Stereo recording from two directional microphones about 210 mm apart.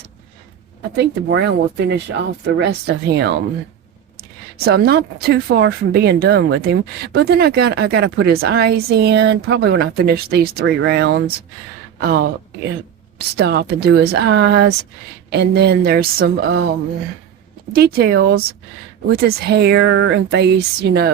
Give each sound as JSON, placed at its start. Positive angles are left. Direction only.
{"t": 0.9, "sound": "speech", "side_deg": -55}
{"t": 17.7, "sound": "speech", "side_deg": -45}